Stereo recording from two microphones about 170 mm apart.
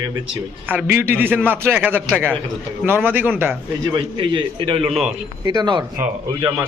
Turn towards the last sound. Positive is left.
turn(degrees=-25)  # may be behind; listen again after turning